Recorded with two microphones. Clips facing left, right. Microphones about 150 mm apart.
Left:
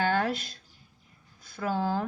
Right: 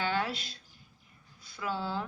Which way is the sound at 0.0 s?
45° left (ahead or behind).